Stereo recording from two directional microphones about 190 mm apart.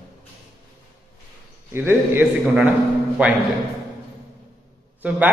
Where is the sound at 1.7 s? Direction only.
10° right (ahead or behind).